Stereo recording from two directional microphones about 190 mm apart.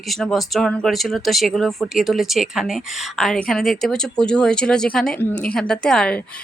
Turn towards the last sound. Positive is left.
turn(degrees=5)  # may be behind; listen again after turning